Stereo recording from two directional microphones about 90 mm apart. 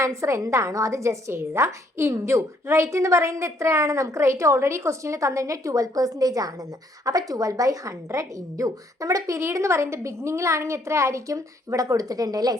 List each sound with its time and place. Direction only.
0.0 s a woman's voice: 35° right (ahead or behind)